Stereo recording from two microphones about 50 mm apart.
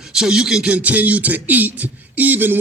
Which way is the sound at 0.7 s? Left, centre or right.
Right.